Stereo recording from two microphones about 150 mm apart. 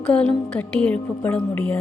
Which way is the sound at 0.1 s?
5° left (ahead or behind).